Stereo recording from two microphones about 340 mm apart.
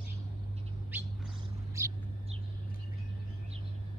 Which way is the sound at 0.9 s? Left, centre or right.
Centre.